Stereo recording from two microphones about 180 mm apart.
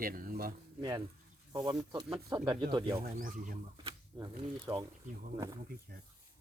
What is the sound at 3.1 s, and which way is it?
Speech, 50° right (ahead or behind).